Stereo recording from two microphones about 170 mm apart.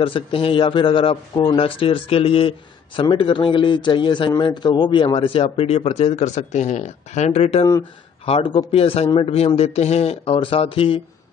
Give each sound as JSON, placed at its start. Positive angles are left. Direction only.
{"t": 0.0, "sound": "a man's voice", "side_deg": 30}